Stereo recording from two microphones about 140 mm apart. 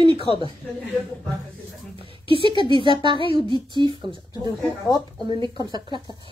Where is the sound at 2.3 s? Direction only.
40° right (ahead or behind).